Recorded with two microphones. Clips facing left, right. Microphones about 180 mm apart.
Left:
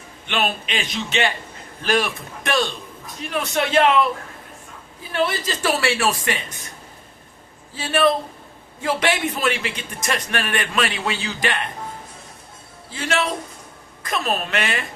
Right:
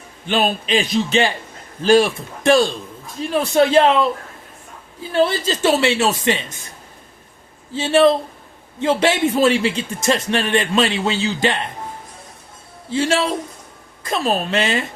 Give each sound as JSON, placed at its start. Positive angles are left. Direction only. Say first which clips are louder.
{"t": 0.3, "sound": "a man's voice", "louder": "right 5 dB", "side_deg": -35}
{"t": 5.1, "sound": "a man's voice", "louder": "right 5 dB", "side_deg": -30}
{"t": 7.7, "sound": "a man's voice", "louder": "right 5 dB", "side_deg": -25}
{"t": 12.9, "sound": "a man's voice", "louder": "right 5 dB", "side_deg": -30}